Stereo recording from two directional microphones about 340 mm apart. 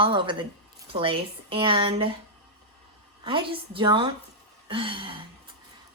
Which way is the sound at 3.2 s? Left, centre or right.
Centre.